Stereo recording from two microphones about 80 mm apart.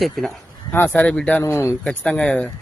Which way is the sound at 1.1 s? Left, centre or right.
Centre.